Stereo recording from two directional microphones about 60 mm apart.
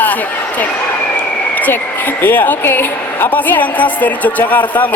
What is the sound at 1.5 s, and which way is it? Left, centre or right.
A woman's voice, left.